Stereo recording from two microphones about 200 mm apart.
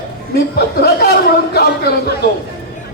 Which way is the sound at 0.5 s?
55° left (ahead or behind).